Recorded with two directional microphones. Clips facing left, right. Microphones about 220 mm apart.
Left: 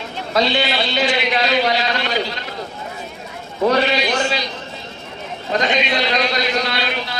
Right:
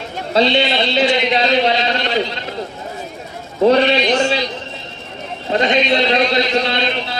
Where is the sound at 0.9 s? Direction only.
30° right (ahead or behind).